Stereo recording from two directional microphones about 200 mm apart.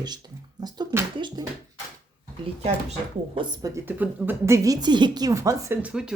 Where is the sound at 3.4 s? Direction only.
20° right (ahead or behind).